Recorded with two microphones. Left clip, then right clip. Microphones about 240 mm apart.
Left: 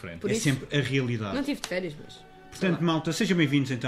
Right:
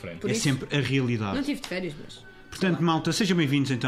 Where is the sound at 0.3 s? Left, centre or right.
Right.